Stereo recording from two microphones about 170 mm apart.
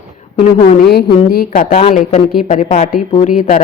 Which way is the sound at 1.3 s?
55° left (ahead or behind).